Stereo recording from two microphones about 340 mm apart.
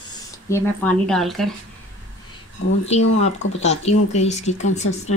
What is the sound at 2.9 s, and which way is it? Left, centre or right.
Speech, centre.